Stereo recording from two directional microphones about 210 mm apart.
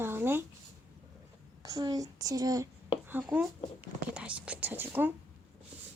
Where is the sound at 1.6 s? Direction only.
15° right (ahead or behind).